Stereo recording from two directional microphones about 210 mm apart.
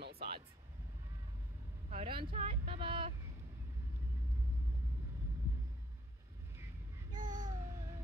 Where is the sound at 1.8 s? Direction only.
30° right (ahead or behind).